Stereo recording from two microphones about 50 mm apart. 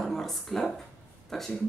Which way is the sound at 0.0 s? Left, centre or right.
Centre.